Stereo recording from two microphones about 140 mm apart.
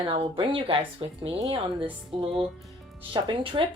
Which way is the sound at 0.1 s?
40° right (ahead or behind).